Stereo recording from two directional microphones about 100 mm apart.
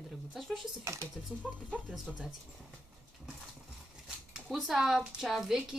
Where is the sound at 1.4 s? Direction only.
5° left (ahead or behind).